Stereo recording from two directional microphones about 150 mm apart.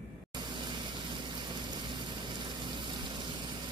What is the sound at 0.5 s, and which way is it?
Vehicle, 35° right (ahead or behind).